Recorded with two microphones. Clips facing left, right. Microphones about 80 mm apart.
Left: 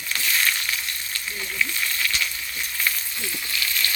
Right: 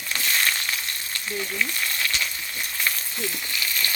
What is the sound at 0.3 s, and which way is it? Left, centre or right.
Crushing, right.